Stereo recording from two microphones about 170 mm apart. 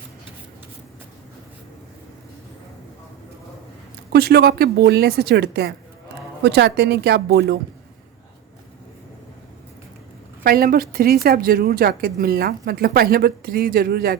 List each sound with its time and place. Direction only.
4.1 s a woman's voice: 70° right (ahead or behind)
6.4 s a woman's voice: 85° right
10.4 s speech: 60° right (ahead or behind)